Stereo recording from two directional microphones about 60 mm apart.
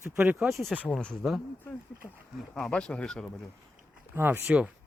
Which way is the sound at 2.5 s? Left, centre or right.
Centre.